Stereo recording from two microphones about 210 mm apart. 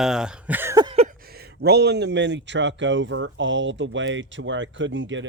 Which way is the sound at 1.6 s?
50° right (ahead or behind).